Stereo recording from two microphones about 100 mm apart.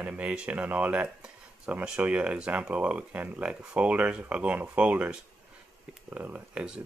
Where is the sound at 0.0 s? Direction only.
10° right (ahead or behind).